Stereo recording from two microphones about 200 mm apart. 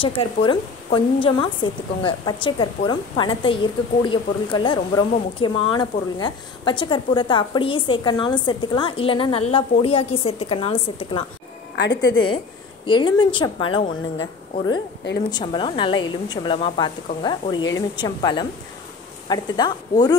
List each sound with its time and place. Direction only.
0.0 s speech: 25° left (ahead or behind)
11.7 s a woman's voice: 60° left (ahead or behind)
12.8 s speech: 25° left (ahead or behind)
15.2 s speech: 25° left (ahead or behind)